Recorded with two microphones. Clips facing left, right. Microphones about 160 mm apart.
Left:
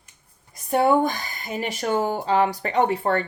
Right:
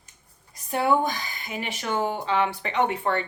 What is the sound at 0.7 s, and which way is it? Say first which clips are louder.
Speech: left 4 dB; 50° left (ahead or behind).